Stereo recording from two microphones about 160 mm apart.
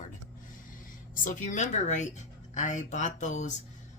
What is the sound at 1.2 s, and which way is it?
Speech, 55° left (ahead or behind).